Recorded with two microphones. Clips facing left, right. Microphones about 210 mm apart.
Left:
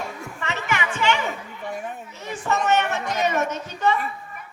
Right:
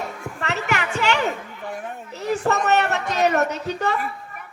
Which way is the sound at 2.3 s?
65° right (ahead or behind).